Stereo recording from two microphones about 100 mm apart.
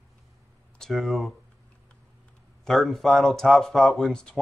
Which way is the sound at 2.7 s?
Centre (ahead or behind).